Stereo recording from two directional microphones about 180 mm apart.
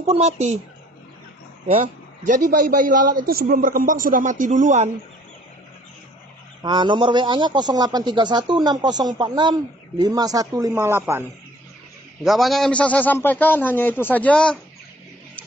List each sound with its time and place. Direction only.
0.0 s speech: 35° right (ahead or behind)
2.2 s a man's voice: 45° right (ahead or behind)
6.6 s a man's voice: 25° right (ahead or behind)
12.2 s a man's voice: centre (ahead or behind)